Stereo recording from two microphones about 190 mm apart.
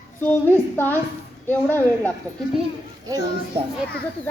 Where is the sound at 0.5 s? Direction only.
10° left (ahead or behind).